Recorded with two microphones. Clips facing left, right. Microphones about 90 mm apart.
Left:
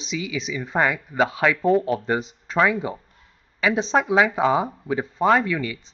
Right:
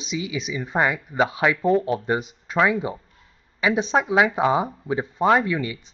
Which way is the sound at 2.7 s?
20° right (ahead or behind).